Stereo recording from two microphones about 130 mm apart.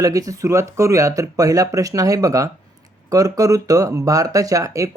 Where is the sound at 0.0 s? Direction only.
25° right (ahead or behind).